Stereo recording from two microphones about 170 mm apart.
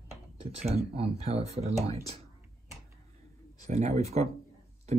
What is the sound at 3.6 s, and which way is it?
Speech, 40° right (ahead or behind).